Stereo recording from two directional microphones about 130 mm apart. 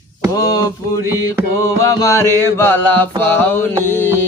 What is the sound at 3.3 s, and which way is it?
Mantra, 15° left (ahead or behind).